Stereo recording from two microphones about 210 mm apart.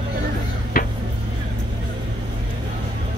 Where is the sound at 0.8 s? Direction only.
45° left (ahead or behind).